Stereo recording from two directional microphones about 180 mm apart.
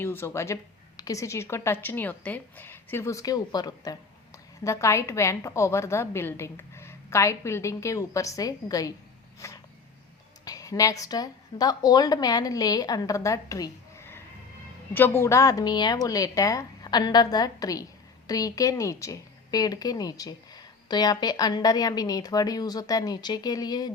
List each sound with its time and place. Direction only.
0.0 s a woman's voice: 15° left (ahead or behind)
9.4 s a sound: 15° left (ahead or behind)
10.4 s a woman's voice: 20° left (ahead or behind)